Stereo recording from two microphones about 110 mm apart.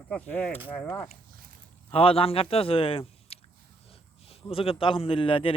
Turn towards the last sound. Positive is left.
turn(degrees=55)  # may be behind; listen again after turning